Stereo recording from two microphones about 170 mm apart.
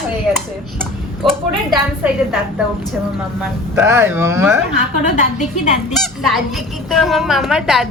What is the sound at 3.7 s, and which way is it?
Speech, 15° right (ahead or behind).